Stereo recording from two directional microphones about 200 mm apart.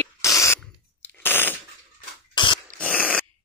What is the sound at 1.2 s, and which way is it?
Machine gun, 10° left (ahead or behind).